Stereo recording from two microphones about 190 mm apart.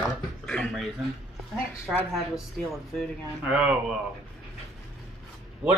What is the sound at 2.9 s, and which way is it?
Speech, 5° right (ahead or behind).